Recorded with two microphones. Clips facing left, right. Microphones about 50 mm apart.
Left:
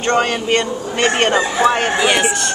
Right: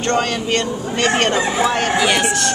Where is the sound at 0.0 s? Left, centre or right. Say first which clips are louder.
Left 2 dB; centre.